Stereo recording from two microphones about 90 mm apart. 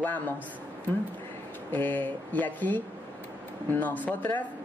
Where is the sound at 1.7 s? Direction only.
20° left (ahead or behind).